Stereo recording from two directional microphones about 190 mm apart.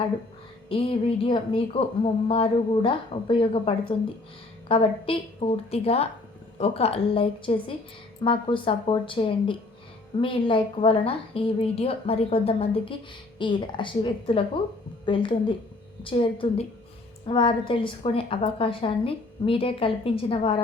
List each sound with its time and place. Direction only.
0.7 s a woman's voice: 30° left (ahead or behind)